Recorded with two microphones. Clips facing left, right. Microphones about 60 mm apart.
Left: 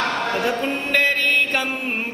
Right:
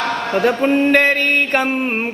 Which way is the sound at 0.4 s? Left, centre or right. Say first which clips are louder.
Right 8 dB; right.